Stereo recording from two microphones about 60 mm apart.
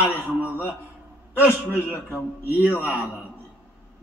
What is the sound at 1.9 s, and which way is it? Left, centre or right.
A man's voice, left.